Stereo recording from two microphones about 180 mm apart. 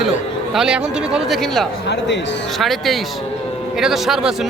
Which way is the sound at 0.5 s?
5° right (ahead or behind).